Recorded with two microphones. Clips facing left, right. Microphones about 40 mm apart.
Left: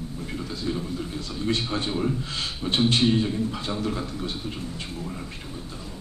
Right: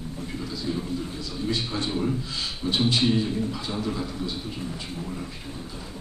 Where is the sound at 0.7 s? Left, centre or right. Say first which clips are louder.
Even; left.